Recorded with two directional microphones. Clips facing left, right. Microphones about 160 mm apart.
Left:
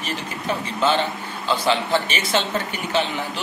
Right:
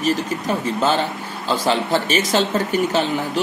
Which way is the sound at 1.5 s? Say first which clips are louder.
Right 2 dB; 40° right (ahead or behind).